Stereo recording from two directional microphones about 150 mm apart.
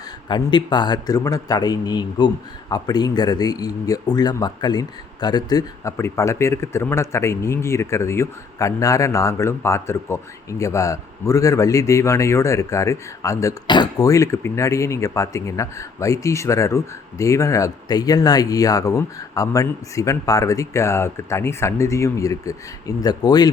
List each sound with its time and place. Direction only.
0.3 s a man's voice: 30° left (ahead or behind)